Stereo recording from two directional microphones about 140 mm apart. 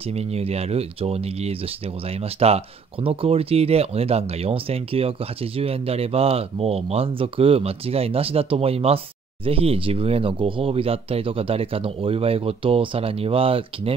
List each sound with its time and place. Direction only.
0.1 s speech: 45° right (ahead or behind)